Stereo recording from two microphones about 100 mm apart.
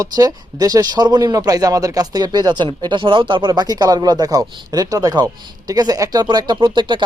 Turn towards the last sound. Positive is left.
turn(degrees=-50)  # may be behind; listen again after turning